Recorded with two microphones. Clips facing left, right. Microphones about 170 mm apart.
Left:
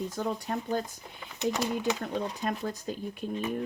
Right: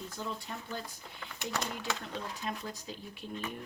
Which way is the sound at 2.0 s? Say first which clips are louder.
Left 8 dB; 50° left (ahead or behind).